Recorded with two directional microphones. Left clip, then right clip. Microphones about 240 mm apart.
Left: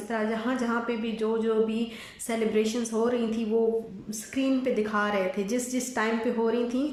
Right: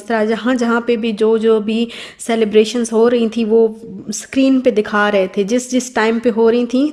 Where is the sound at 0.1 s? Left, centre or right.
Right.